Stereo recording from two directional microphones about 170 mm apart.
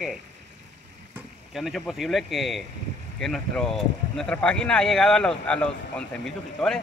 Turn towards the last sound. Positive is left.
turn(degrees=5)  # may be behind; listen again after turning